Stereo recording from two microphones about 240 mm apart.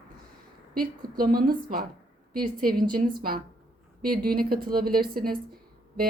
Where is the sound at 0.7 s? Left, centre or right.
Right.